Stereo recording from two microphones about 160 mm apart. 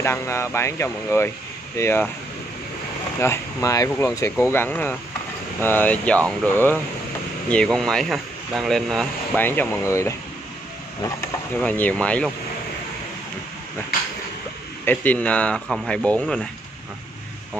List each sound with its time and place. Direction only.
0.0 s speech: 15° left (ahead or behind)
3.2 s speech: 20° left (ahead or behind)
11.6 s speech: 10° left (ahead or behind)
14.9 s speech: 10° left (ahead or behind)